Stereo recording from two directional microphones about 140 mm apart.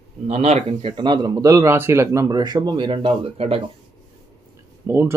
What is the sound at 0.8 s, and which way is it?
Speech, 30° right (ahead or behind).